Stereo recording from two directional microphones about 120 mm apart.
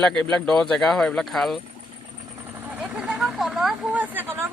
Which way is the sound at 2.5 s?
15° right (ahead or behind).